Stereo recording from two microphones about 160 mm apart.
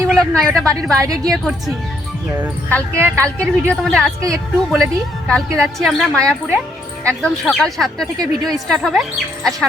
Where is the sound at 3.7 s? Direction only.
5° left (ahead or behind).